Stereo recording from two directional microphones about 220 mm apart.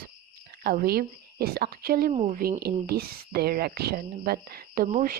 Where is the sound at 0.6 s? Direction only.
45° right (ahead or behind).